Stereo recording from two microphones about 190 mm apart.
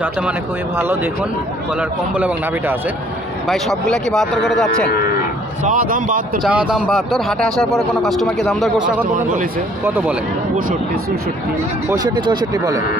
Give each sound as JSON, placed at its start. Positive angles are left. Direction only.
{"t": 1.8, "sound": "a man's voice", "side_deg": -5}
{"t": 5.6, "sound": "speech", "side_deg": -45}
{"t": 6.4, "sound": "a man's voice", "side_deg": -5}
{"t": 11.9, "sound": "speech", "side_deg": -20}